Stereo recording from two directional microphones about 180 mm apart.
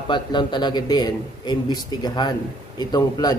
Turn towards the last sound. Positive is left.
turn(degrees=20)  # may be behind; listen again after turning